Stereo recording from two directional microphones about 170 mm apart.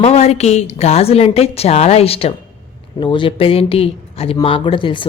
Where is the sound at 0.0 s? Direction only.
40° left (ahead or behind).